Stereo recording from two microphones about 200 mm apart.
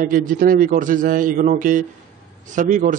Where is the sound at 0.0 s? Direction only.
45° right (ahead or behind).